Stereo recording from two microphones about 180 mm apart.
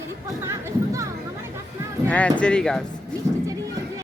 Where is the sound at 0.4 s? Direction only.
15° right (ahead or behind).